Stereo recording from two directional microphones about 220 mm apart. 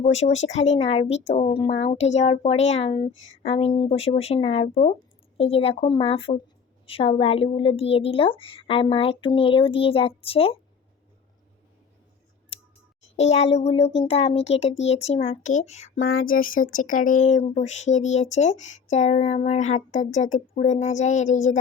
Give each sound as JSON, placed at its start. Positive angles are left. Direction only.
{"t": 0.2, "sound": "speech", "side_deg": 40}
{"t": 0.6, "sound": "a woman's voice", "side_deg": 30}
{"t": 13.0, "sound": "a woman's voice", "side_deg": 30}
{"t": 16.0, "sound": "speech", "side_deg": 65}
{"t": 16.4, "sound": "speech", "side_deg": 40}